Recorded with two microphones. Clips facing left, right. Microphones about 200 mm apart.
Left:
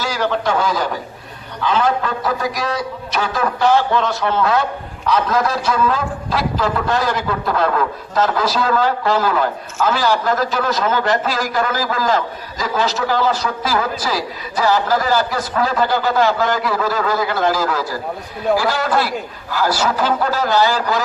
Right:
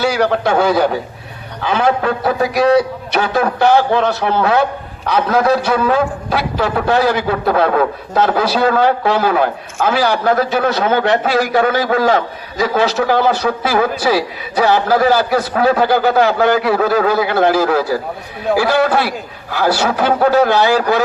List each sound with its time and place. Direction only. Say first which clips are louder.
0.0 s a man's voice: right 5 dB; 65° right (ahead or behind)